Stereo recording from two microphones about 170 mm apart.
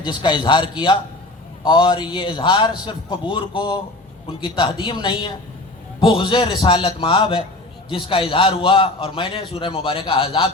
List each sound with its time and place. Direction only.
0.0 s a man's voice: 30° left (ahead or behind)